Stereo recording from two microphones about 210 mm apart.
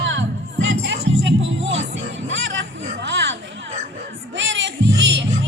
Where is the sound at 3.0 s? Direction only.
55° right (ahead or behind).